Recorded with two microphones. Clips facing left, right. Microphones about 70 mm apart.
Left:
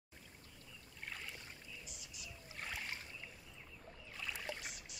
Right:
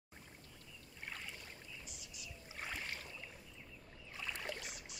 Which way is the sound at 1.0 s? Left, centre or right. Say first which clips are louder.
Even; centre.